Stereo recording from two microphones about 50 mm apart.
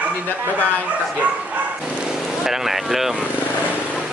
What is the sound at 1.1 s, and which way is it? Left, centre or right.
Speech, right.